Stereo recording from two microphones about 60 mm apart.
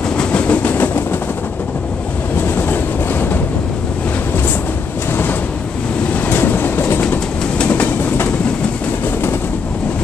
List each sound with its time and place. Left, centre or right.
0.2 s train: left
2.5 s train: left
6.2 s train: left
7.5 s train: left